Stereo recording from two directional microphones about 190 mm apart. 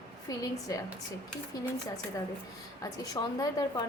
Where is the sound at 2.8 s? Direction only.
20° left (ahead or behind).